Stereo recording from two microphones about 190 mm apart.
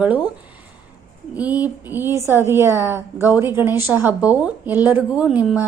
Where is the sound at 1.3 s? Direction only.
10° right (ahead or behind).